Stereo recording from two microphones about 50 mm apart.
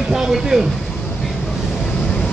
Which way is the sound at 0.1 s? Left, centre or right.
Centre.